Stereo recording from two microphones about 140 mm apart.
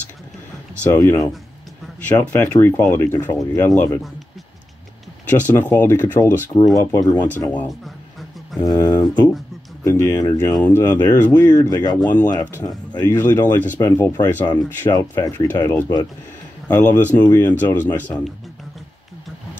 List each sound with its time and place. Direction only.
0.9 s speech: 15° left (ahead or behind)
5.5 s speech: 15° left (ahead or behind)
8.5 s speech: 30° left (ahead or behind); by 10.8 s 10° left (ahead or behind)
10.8 s speech: 25° left (ahead or behind)
12.1 s speech: 15° left (ahead or behind)